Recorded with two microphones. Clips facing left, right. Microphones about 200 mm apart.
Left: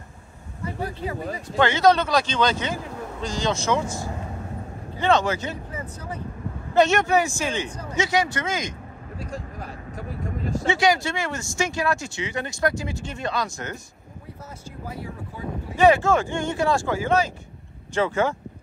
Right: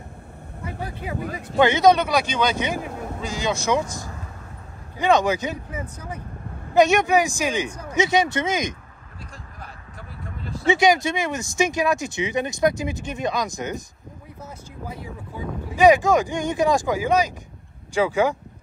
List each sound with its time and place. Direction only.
1.6 s speech: 15° right (ahead or behind)
4.9 s speech: 15° right (ahead or behind)
9.2 s a sound: 45° left (ahead or behind)
10.7 s speech: 20° right (ahead or behind)
15.8 s speech: 15° right (ahead or behind)